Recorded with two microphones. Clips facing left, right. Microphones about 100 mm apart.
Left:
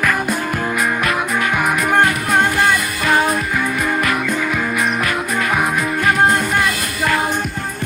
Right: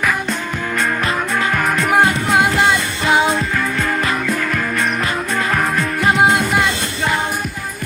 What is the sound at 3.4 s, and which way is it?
Music, 5° left (ahead or behind).